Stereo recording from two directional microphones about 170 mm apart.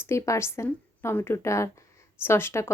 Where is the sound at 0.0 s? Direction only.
15° left (ahead or behind).